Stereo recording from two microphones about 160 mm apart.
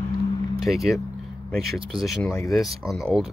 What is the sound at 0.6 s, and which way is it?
Speech, centre (ahead or behind).